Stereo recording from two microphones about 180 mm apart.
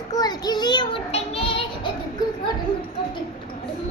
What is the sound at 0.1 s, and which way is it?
Child singing, 20° left (ahead or behind).